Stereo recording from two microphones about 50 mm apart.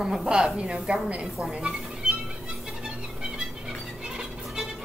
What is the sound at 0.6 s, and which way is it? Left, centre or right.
A woman's voice, right.